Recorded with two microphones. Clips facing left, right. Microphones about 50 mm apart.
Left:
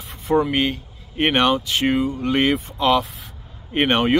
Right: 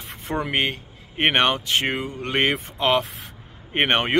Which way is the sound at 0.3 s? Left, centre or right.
Right.